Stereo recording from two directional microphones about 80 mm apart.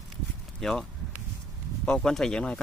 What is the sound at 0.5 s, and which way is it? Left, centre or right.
Speech, centre.